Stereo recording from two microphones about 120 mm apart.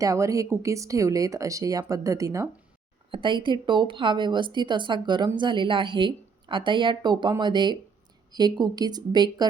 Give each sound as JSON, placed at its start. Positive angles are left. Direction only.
{"t": 0.0, "sound": "speech", "side_deg": -25}
{"t": 3.1, "sound": "a woman's voice", "side_deg": -40}